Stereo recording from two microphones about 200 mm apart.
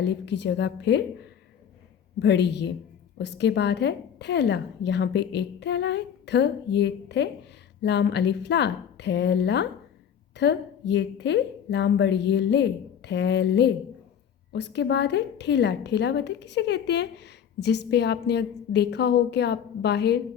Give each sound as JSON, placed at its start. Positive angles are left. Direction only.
{"t": 0.0, "sound": "a woman's voice", "side_deg": 60}